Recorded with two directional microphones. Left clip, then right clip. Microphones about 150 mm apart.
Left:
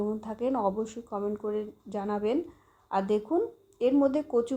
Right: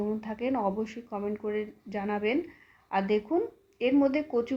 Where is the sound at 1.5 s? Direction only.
45° left (ahead or behind).